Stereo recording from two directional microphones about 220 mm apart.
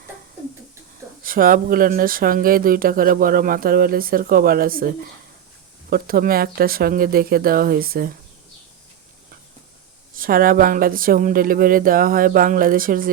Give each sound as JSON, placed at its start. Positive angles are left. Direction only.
{"t": 1.2, "sound": "speech", "side_deg": -40}
{"t": 10.2, "sound": "speech", "side_deg": -40}